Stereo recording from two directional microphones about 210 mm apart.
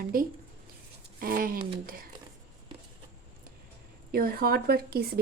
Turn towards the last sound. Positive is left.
turn(degrees=-45)  # may be behind; listen again after turning